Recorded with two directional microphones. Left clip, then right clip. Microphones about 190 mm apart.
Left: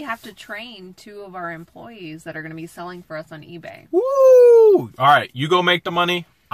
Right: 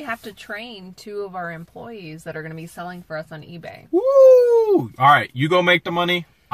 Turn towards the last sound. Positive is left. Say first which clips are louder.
# even
turn(degrees=20)  # may be behind; listen again after turning